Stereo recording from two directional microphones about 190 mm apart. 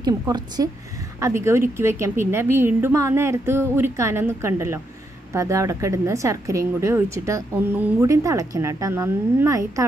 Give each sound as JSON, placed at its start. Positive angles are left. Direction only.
{"t": 0.0, "sound": "a woman's voice", "side_deg": -20}